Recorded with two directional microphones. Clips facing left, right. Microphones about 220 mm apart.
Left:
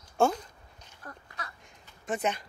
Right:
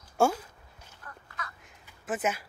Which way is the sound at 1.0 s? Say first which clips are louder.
Left 1 dB; 35° left (ahead or behind).